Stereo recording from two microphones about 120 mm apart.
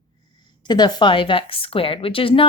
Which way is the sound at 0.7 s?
35° left (ahead or behind).